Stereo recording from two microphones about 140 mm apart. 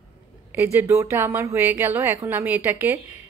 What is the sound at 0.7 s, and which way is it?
A woman's voice, 15° right (ahead or behind).